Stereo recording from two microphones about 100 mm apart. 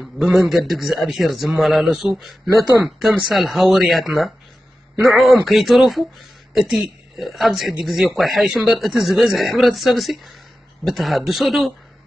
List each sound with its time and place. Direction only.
0.0 s a man's voice: centre (ahead or behind)